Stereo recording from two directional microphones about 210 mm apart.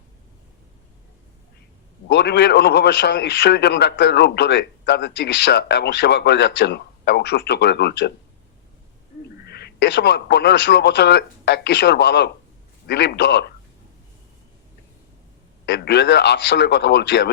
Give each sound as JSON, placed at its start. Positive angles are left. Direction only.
{"t": 2.0, "sound": "a man's voice", "side_deg": 55}
{"t": 9.5, "sound": "a man's voice", "side_deg": 50}
{"t": 15.6, "sound": "a man's voice", "side_deg": 55}